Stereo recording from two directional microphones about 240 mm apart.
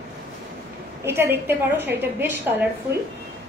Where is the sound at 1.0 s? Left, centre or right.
Centre.